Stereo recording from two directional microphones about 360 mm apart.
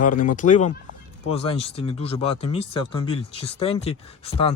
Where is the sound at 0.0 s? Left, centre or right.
Left.